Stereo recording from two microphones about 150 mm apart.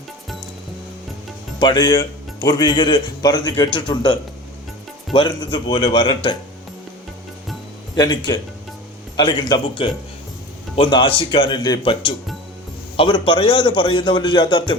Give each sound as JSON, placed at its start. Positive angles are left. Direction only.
{"t": 1.5, "sound": "a man's voice", "side_deg": 30}
{"t": 7.9, "sound": "a man's voice", "side_deg": 25}